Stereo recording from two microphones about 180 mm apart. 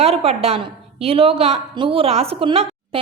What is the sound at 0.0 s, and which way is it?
A woman's voice, 35° right (ahead or behind).